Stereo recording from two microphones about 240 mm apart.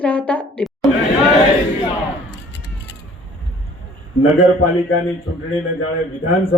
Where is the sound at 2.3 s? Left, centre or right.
Left.